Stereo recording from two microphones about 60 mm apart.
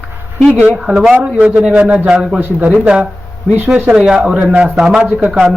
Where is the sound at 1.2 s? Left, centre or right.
Right.